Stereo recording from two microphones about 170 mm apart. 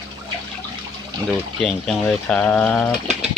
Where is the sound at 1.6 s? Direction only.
5° left (ahead or behind).